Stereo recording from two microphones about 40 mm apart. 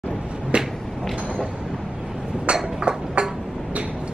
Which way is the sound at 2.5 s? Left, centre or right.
Right.